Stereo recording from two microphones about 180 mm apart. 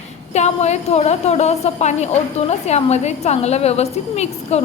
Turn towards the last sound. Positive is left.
turn(degrees=35)  # may be behind; listen again after turning